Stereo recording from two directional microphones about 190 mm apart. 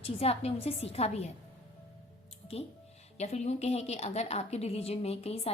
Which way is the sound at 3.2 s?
35° left (ahead or behind).